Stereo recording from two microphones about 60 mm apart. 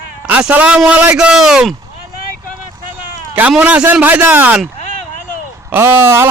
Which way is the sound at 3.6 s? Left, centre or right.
Right.